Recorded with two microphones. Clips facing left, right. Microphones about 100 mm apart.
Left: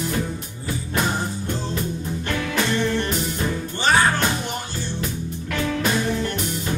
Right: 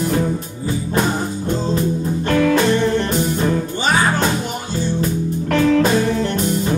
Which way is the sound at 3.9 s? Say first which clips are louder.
Right 1 dB; 15° right (ahead or behind).